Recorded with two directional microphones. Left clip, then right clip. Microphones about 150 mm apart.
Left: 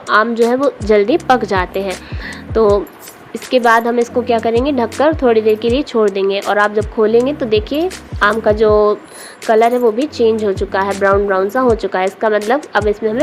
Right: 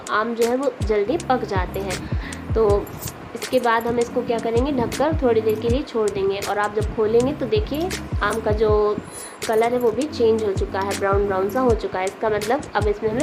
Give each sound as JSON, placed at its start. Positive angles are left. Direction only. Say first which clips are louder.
{"t": 0.1, "sound": "a woman's voice", "louder": "left 8 dB", "side_deg": 50}